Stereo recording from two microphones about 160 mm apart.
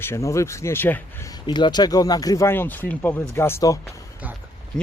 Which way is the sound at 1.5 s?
25° left (ahead or behind).